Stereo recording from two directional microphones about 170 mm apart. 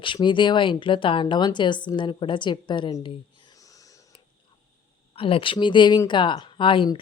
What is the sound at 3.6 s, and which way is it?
Wheeze, 20° left (ahead or behind).